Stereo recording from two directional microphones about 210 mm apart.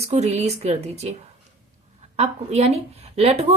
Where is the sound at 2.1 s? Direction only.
30° right (ahead or behind).